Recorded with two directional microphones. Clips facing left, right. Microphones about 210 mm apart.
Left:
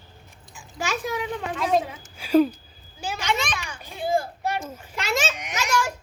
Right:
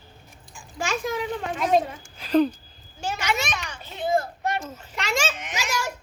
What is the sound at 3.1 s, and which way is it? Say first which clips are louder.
Speech: left 1 dB; 5° right (ahead or behind).